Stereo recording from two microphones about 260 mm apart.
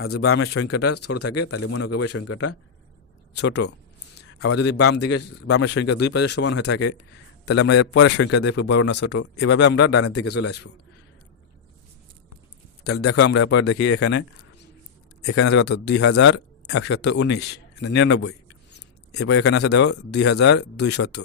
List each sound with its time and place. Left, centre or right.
0.3 s speech: left
3.3 s a man's voice: left
9.7 s a man's voice: left
12.8 s a man's voice: left
13.1 s speech: left
15.3 s speech: left